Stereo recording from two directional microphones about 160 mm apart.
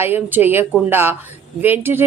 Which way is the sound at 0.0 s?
10° right (ahead or behind).